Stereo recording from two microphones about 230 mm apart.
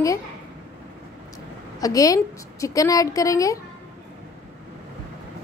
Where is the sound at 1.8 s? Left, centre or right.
Centre.